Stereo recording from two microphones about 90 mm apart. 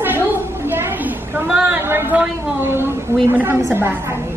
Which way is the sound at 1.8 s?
25° right (ahead or behind).